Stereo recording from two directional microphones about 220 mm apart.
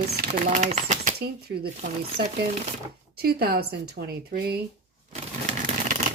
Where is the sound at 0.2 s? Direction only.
35° right (ahead or behind).